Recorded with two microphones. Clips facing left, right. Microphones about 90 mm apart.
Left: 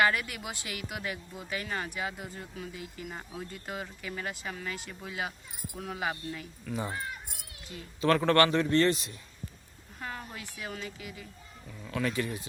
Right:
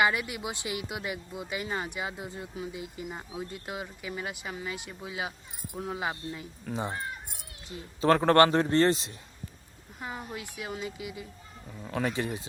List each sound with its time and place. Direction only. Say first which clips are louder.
0.0 s speech: right 1 dB; 20° right (ahead or behind)
10.0 s speech: right 2 dB; 15° right (ahead or behind)
11.8 s speech: right 1 dB; 30° right (ahead or behind)